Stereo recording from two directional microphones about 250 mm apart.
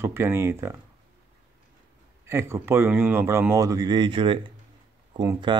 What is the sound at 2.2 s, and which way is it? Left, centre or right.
Speech, centre.